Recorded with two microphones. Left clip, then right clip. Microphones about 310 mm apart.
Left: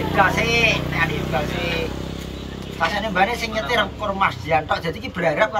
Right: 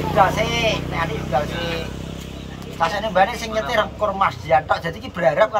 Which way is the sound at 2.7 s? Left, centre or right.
Right.